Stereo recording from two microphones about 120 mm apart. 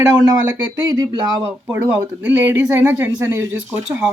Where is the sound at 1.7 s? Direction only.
15° right (ahead or behind).